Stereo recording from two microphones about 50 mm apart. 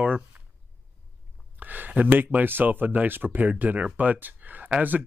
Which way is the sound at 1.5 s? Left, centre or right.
Right.